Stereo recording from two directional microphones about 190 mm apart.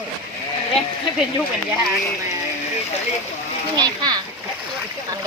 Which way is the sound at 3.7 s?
20° right (ahead or behind).